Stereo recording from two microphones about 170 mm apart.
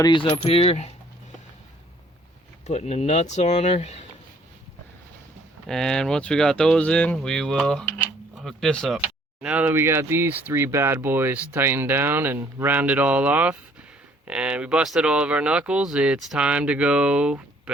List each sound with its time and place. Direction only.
0.0 s coin: 25° left (ahead or behind)
0.4 s speech: 35° left (ahead or behind)
2.6 s speech: 40° left (ahead or behind)
5.6 s speech: 5° left (ahead or behind)
8.0 s a sound: centre (ahead or behind)
9.0 s speech: 10° right (ahead or behind)